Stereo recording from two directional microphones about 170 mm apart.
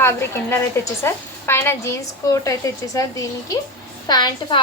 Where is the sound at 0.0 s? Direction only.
15° left (ahead or behind).